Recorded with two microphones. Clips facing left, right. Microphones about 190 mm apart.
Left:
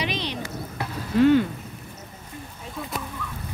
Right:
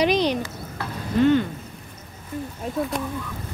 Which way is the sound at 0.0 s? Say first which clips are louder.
Right 9 dB; 45° right (ahead or behind).